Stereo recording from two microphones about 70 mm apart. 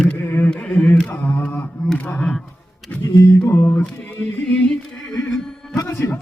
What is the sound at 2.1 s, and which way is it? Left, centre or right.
Speech, centre.